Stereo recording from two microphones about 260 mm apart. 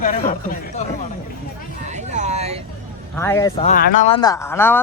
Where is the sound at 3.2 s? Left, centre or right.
Centre.